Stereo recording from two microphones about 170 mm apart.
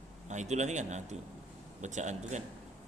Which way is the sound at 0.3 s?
45° right (ahead or behind).